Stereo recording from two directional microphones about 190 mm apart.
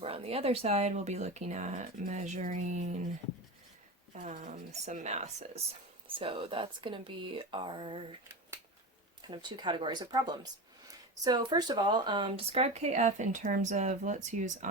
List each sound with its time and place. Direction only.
0.0 s speech: 30° right (ahead or behind)
4.1 s speech: 40° right (ahead or behind)
9.2 s speech: 25° right (ahead or behind); by 14.7 s 40° right (ahead or behind)